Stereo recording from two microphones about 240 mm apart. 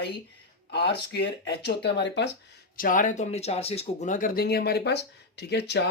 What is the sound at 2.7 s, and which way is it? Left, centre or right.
Speech, left.